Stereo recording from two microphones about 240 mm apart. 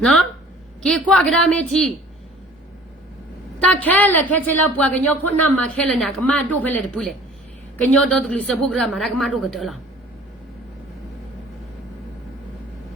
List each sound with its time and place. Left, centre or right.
0.8 s a woman's voice: centre
3.6 s a woman's voice: centre